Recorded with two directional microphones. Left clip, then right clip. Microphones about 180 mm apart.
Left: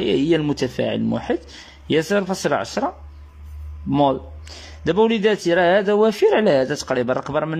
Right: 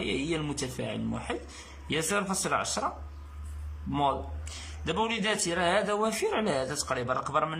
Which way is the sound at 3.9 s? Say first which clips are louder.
Left 10 dB; 30° left (ahead or behind).